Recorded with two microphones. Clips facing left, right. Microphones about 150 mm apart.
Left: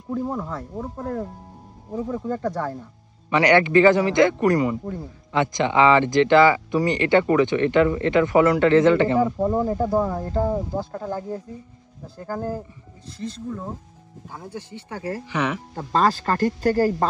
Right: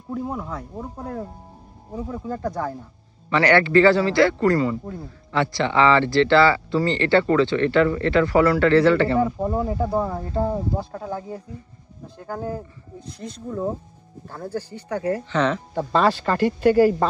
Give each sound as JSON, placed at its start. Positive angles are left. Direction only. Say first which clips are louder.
{"t": 0.1, "sound": "speech", "louder": "left 2 dB", "side_deg": 0}
{"t": 2.0, "sound": "speech", "louder": "left 3 dB", "side_deg": -5}
{"t": 3.3, "sound": "speech", "louder": "left 1 dB", "side_deg": 20}
{"t": 9.2, "sound": "speech", "louder": "left 2 dB", "side_deg": -5}
{"t": 14.2, "sound": "speech", "louder": "right 6 dB", "side_deg": 10}
{"t": 15.2, "sound": "speech", "louder": "even", "side_deg": 10}
{"t": 15.9, "sound": "speech", "louder": "even", "side_deg": 40}